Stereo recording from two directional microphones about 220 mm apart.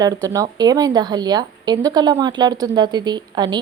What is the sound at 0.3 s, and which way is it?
A woman's voice, 15° right (ahead or behind).